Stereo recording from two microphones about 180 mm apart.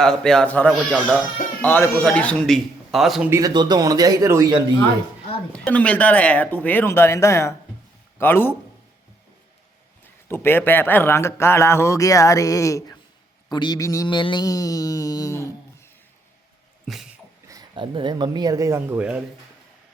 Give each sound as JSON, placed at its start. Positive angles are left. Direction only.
{"t": 0.0, "sound": "a man's voice", "side_deg": 5}
{"t": 3.2, "sound": "speech", "side_deg": -15}
{"t": 5.6, "sound": "a man's voice", "side_deg": 5}
{"t": 10.2, "sound": "a man's voice", "side_deg": 10}
{"t": 13.5, "sound": "mantra", "side_deg": 25}
{"t": 16.8, "sound": "sneeze", "side_deg": 0}
{"t": 17.5, "sound": "speech", "side_deg": -25}